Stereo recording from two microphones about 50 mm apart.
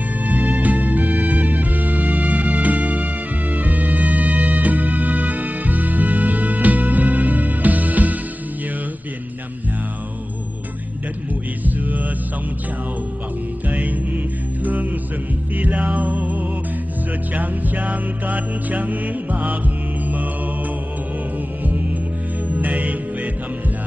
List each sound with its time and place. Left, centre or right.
0.2 s music: right
11.6 s music: right
13.7 s music: right
22.5 s music: right